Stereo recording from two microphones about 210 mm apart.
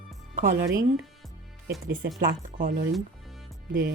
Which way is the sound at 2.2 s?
40° right (ahead or behind).